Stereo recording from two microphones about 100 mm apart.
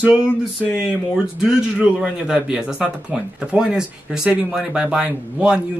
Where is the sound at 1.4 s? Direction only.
5° right (ahead or behind).